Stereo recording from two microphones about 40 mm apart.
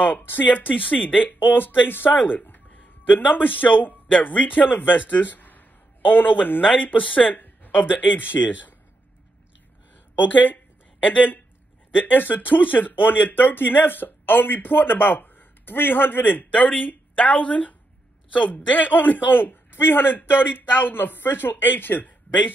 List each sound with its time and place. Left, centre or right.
0.2 s speech: left
0.7 s speech: left
1.4 s speech: left
6.8 s speech: left
7.3 s speech: left
10.1 s a sound: left
12.0 s a woman's voice: left